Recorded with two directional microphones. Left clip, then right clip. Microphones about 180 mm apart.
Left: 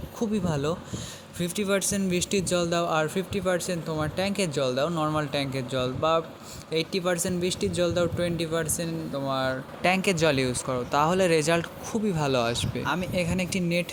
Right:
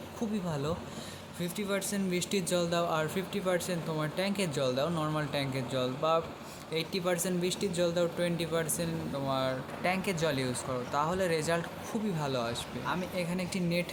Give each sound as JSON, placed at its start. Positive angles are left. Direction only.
{"t": 0.2, "sound": "speech", "side_deg": 35}
{"t": 9.8, "sound": "speech", "side_deg": 40}